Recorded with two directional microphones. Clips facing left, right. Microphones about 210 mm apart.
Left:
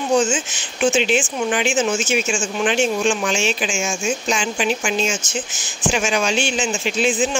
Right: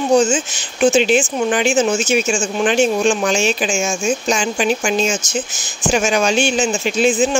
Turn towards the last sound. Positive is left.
turn(degrees=-40)  # may be behind; listen again after turning